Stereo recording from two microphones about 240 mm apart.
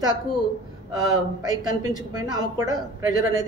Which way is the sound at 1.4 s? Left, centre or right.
Centre.